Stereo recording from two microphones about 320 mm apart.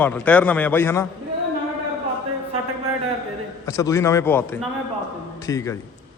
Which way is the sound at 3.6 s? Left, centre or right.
Centre.